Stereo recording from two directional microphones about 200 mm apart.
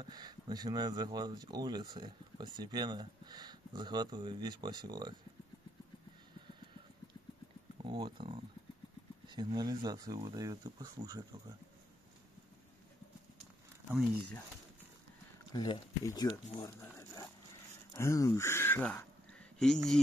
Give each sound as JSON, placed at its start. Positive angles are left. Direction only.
{"t": 0.0, "sound": "speech", "side_deg": -20}
{"t": 7.8, "sound": "speech", "side_deg": -25}
{"t": 15.5, "sound": "speech", "side_deg": 20}